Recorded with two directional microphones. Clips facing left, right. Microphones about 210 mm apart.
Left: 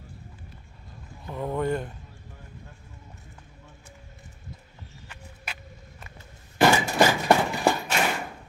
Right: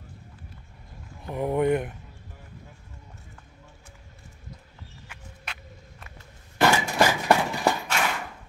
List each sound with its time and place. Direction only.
1.2 s speech: 20° right (ahead or behind)
5.4 s vehicle: 5° left (ahead or behind)
6.6 s a sound: 15° left (ahead or behind)